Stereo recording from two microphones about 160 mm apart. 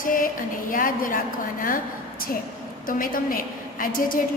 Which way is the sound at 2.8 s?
60° left (ahead or behind).